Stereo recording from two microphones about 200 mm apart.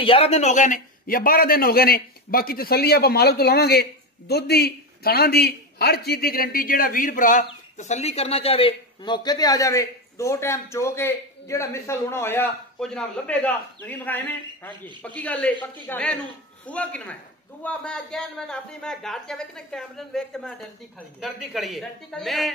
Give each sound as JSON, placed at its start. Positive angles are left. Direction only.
{"t": 0.0, "sound": "a man's voice", "side_deg": 30}